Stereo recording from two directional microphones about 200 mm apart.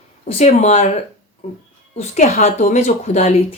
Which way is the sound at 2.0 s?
35° left (ahead or behind).